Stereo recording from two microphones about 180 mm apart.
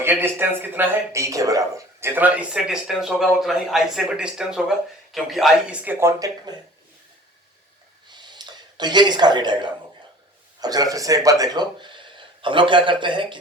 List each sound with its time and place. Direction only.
0.0 s speech: 10° right (ahead or behind)
8.0 s a sound: 25° right (ahead or behind)
10.6 s speech: 20° right (ahead or behind)